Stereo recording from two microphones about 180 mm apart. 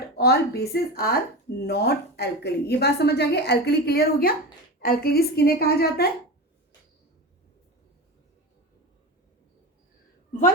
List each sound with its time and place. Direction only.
0.2 s a woman's voice: 65° left (ahead or behind)